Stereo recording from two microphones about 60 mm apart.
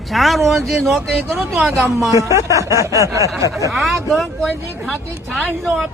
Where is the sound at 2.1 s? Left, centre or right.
Right.